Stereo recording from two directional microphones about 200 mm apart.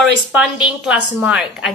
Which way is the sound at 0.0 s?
5° right (ahead or behind).